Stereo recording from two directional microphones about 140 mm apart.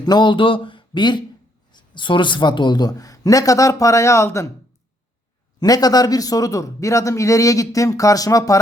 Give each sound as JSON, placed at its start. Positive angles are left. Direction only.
{"t": 0.0, "sound": "a man's voice", "side_deg": 30}
{"t": 5.5, "sound": "a man's voice", "side_deg": 25}